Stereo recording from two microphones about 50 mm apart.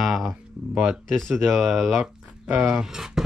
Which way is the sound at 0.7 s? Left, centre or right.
Right.